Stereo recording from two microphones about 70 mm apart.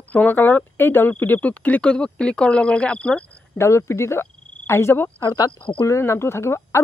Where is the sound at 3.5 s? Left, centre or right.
Left.